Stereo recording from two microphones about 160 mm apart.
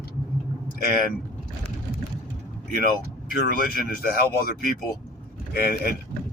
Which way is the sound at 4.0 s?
70° left (ahead or behind).